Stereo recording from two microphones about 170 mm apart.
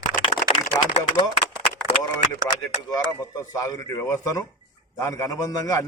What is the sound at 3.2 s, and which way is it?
A man's voice, 20° left (ahead or behind).